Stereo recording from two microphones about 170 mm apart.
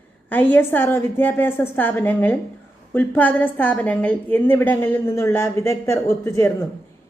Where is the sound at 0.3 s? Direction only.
10° left (ahead or behind).